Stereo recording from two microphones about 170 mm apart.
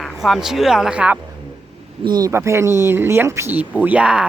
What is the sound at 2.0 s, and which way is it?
Speech, 25° right (ahead or behind).